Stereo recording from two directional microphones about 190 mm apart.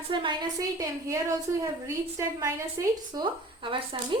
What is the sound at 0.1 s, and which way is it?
A woman's voice, 25° right (ahead or behind).